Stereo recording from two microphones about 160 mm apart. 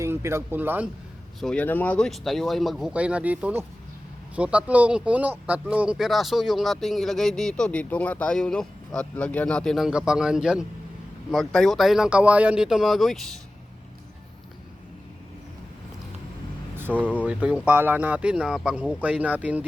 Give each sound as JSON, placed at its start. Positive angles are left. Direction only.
{"t": 0.0, "sound": "speech", "side_deg": -15}
{"t": 1.4, "sound": "speech", "side_deg": 5}
{"t": 16.9, "sound": "speech", "side_deg": 10}
{"t": 17.2, "sound": "speech", "side_deg": -10}